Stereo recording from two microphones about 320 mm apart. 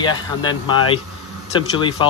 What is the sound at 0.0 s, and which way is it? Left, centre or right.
Speech, centre.